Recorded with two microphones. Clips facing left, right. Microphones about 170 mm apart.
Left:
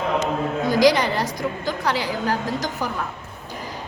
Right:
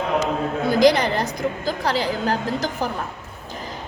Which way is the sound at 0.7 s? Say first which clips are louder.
Right 1 dB; 50° right (ahead or behind).